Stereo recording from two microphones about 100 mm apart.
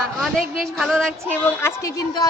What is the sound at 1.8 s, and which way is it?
Speech, 35° left (ahead or behind).